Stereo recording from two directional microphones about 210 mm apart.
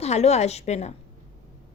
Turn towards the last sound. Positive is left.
turn(degrees=30)  # may be behind; listen again after turning